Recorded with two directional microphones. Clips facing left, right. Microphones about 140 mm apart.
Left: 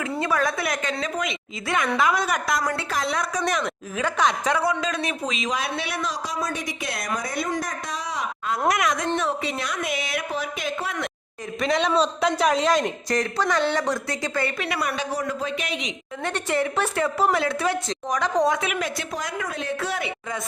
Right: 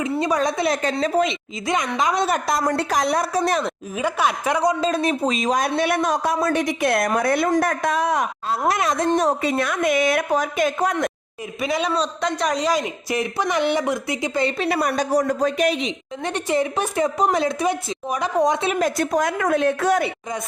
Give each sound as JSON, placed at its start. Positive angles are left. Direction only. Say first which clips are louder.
{"t": 0.0, "sound": "a woman's voice", "louder": "right 3 dB", "side_deg": -20}
{"t": 1.6, "sound": "a man's voice", "louder": "right 1 dB", "side_deg": -15}
{"t": 2.6, "sound": "a man's voice", "louder": "right 6 dB", "side_deg": -45}
{"t": 3.9, "sound": "a man's voice", "louder": "right 1 dB", "side_deg": -10}
{"t": 4.7, "sound": "a man's voice", "louder": "right 6 dB", "side_deg": -35}
{"t": 8.4, "sound": "speech", "louder": "even", "side_deg": -30}
{"t": 9.1, "sound": "a man's voice", "louder": "right 6 dB", "side_deg": -45}
{"t": 11.6, "sound": "a man's voice", "louder": "left 1 dB", "side_deg": -5}
{"t": 14.6, "sound": "speech", "louder": "right 6 dB", "side_deg": -35}
{"t": 16.2, "sound": "a man's voice", "louder": "right 3 dB", "side_deg": -15}
{"t": 18.6, "sound": "a man's voice", "louder": "right 7 dB", "side_deg": -35}